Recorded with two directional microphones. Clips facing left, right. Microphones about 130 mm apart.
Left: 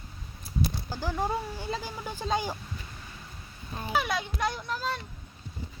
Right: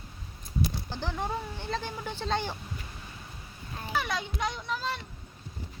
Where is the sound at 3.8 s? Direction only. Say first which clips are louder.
Left 3 dB; 10° left (ahead or behind).